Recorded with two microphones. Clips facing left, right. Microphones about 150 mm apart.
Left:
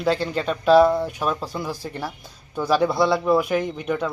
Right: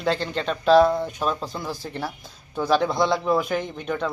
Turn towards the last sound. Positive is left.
turn(degrees=5)  # may be behind; listen again after turning